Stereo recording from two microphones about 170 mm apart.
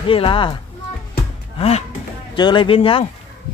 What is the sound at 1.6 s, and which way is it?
A man's voice, 40° left (ahead or behind).